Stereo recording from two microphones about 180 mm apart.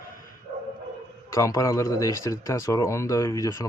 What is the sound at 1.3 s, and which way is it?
Speech, 15° left (ahead or behind).